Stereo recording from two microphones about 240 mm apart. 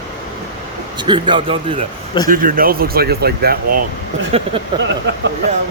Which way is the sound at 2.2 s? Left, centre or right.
Right.